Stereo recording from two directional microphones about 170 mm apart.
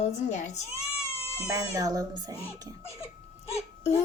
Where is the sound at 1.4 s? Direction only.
20° right (ahead or behind).